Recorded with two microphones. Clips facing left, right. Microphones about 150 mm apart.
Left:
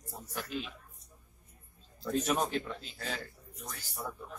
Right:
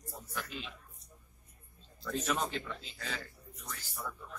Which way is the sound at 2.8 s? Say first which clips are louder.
Left 3 dB; 50° left (ahead or behind).